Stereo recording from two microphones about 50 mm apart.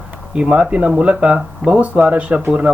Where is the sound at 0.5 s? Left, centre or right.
Right.